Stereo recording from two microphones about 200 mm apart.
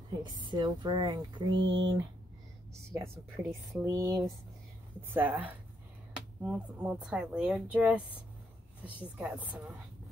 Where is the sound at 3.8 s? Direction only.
15° right (ahead or behind).